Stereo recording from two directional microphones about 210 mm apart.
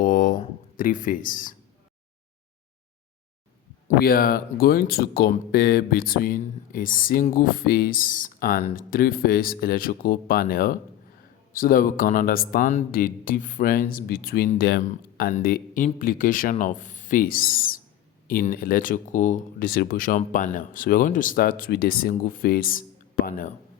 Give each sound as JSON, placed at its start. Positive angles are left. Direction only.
{"t": 0.0, "sound": "a sound", "side_deg": 40}
{"t": 0.8, "sound": "speech", "side_deg": 40}
{"t": 3.8, "sound": "speech", "side_deg": 45}